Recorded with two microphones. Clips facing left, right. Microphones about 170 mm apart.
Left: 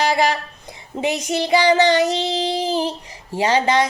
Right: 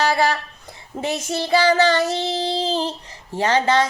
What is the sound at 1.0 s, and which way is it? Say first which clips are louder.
Speech: left 3 dB; 15° left (ahead or behind).